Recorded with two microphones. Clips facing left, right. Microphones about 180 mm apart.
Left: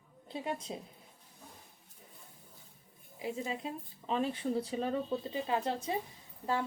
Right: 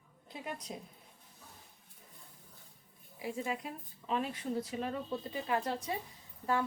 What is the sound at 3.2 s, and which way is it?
Speech, 25° left (ahead or behind).